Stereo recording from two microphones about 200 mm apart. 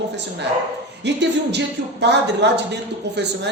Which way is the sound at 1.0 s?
60° right (ahead or behind).